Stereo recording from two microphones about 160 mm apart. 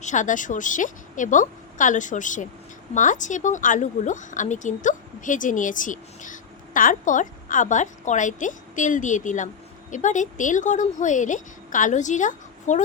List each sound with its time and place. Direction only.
0.0 s speech: 50° left (ahead or behind)